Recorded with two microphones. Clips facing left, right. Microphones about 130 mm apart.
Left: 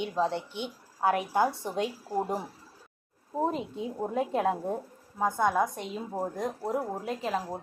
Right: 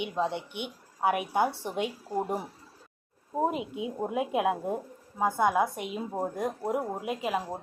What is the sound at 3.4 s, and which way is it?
A woman's voice, 10° right (ahead or behind).